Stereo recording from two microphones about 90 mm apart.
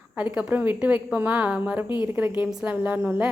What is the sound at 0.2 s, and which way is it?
A woman's voice, 15° right (ahead or behind).